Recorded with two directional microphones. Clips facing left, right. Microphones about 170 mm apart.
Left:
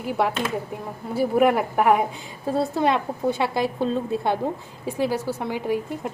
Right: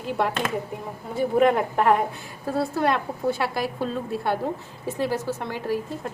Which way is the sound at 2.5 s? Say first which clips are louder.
Left 2 dB; 20° left (ahead or behind).